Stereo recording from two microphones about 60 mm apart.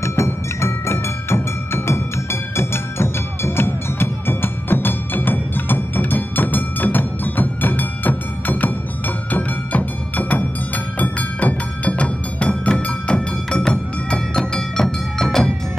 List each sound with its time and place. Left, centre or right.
0.0 s music: left; by 15.2 s centre